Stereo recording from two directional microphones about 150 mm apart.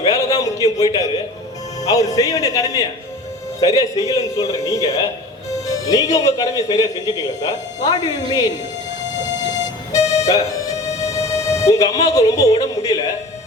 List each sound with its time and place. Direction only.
0.0 s a sound: 25° left (ahead or behind)
1.8 s a man's voice: 25° left (ahead or behind)
5.6 s music: 25° left (ahead or behind)
6.1 s a man's voice: 25° left (ahead or behind)
10.1 s music: 25° left (ahead or behind)